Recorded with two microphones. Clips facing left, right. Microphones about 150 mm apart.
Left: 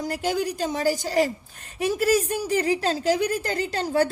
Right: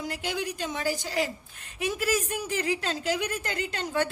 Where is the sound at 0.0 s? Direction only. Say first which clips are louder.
Left 6 dB; 40° left (ahead or behind).